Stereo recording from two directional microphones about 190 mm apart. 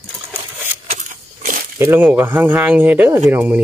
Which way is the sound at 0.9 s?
45° right (ahead or behind).